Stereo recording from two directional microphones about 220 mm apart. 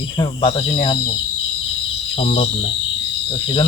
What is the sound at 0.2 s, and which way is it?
Speech, 25° left (ahead or behind).